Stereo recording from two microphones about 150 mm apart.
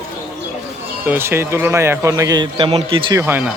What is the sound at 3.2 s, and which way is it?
Speech, 10° right (ahead or behind).